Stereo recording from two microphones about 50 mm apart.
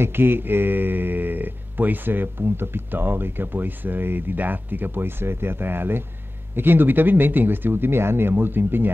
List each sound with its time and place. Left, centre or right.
0.0 s speech: right